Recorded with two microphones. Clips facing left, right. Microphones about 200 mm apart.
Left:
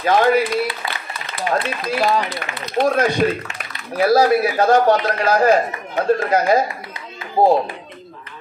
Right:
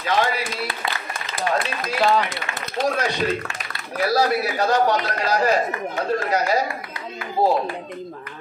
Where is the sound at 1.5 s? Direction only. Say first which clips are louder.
Left 2 dB; 15° left (ahead or behind).